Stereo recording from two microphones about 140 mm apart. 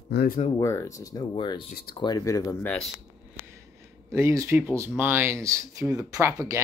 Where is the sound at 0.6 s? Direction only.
20° left (ahead or behind).